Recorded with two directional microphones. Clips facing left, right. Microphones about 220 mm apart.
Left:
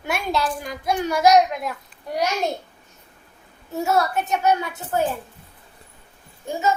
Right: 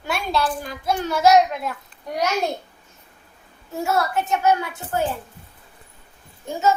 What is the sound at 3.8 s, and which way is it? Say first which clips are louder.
Child singing: left 1 dB; 20° left (ahead or behind).